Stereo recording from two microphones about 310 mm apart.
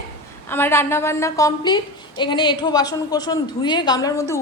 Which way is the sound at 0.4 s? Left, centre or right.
Centre.